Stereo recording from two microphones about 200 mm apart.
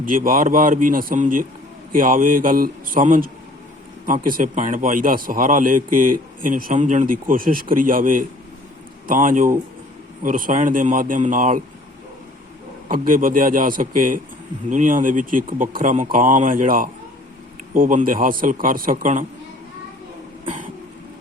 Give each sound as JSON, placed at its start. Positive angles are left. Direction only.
{"t": 0.0, "sound": "a man's voice", "side_deg": -45}
{"t": 12.9, "sound": "a man's voice", "side_deg": -45}